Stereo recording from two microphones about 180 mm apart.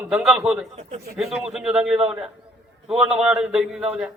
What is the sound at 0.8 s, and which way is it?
Speech, 40° right (ahead or behind).